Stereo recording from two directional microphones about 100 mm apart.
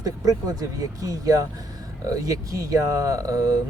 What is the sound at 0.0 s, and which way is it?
Speech, 40° right (ahead or behind).